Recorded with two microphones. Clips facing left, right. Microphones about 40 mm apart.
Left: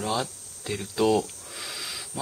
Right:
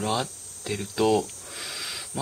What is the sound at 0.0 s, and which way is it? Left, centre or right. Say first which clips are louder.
Speech: right 1 dB; centre.